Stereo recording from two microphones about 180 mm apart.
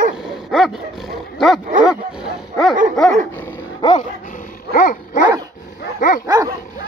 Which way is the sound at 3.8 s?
45° left (ahead or behind).